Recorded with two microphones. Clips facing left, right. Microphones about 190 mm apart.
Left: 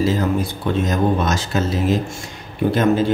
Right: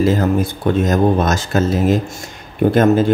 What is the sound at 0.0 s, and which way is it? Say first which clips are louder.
Speech: right 4 dB; 50° right (ahead or behind).